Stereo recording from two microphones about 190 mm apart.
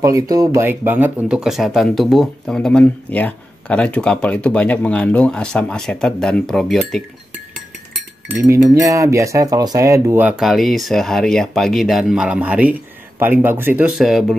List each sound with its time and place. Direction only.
0.0 s speech: 20° right (ahead or behind); by 7.0 s centre (ahead or behind)
8.3 s cutlery: 15° right (ahead or behind)